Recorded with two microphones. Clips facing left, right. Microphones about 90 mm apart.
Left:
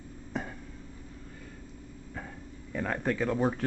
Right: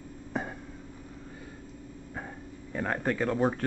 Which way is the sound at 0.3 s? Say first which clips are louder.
Right 2 dB; 10° right (ahead or behind).